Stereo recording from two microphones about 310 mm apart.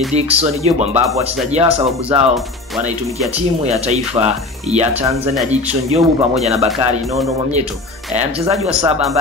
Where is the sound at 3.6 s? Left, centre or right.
Right.